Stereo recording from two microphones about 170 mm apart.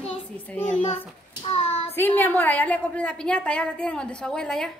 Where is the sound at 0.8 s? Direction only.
35° left (ahead or behind).